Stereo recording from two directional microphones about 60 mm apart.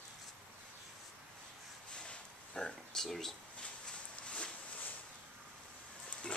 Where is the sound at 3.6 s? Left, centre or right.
Centre.